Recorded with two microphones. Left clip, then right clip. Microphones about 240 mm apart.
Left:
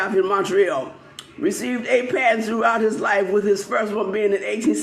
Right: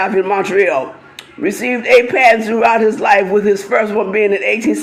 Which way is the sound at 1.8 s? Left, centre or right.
Centre.